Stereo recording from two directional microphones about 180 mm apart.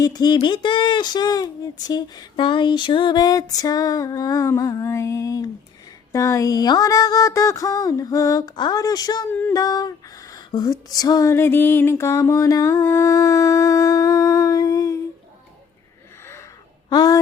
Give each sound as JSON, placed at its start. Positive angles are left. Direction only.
{"t": 0.0, "sound": "speech", "side_deg": 20}
{"t": 9.3, "sound": "female singing", "side_deg": 10}
{"t": 9.6, "sound": "speech", "side_deg": 20}
{"t": 16.9, "sound": "speech", "side_deg": 20}